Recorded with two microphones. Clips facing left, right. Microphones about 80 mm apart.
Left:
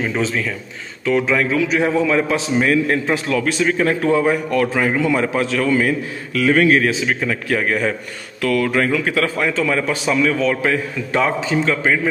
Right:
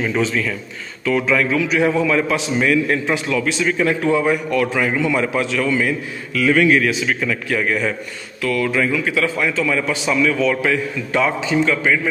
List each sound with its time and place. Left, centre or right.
0.2 s a man's voice: left
7.4 s a man's voice: left
8.4 s a man's voice: left